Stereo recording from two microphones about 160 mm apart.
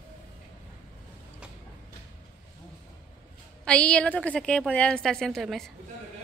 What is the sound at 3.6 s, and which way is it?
A woman's voice, 5° left (ahead or behind).